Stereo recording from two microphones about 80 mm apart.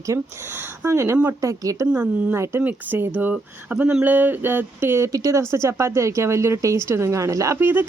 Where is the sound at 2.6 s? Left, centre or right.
Right.